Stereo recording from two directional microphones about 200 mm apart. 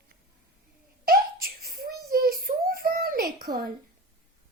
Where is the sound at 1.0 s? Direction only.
50° right (ahead or behind).